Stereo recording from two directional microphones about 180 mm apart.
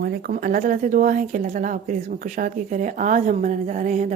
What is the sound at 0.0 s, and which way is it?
A woman's voice, 55° right (ahead or behind).